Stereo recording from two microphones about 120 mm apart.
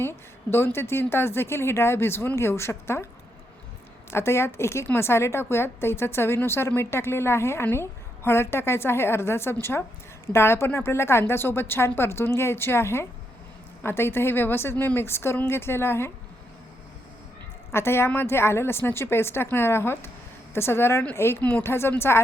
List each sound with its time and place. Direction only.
0.0 s a woman's voice: 20° left (ahead or behind)
4.1 s a woman's voice: 20° left (ahead or behind)
17.7 s a woman's voice: 20° left (ahead or behind)